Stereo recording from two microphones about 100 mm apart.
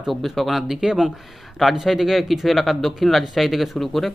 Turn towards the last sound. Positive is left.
turn(degrees=0)  # may be behind; listen again after turning